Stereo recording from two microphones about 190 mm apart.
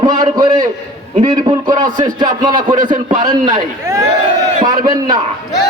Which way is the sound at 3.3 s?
20° right (ahead or behind).